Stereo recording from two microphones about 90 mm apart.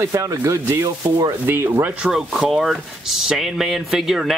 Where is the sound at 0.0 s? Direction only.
40° right (ahead or behind).